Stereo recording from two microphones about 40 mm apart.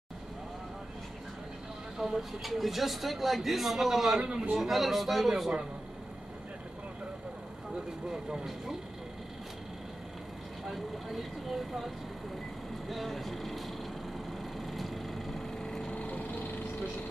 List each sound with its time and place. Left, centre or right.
2.0 s speech: centre
4.2 s a man's voice: right
4.6 s speech: centre
8.1 s speech: centre
10.6 s speech: centre
14.6 s vehicle: centre
15.9 s a sound: left